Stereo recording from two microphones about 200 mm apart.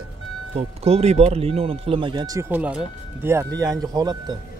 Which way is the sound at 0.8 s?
30° right (ahead or behind).